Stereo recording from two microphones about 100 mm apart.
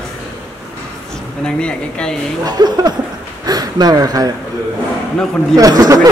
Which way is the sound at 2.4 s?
45° right (ahead or behind).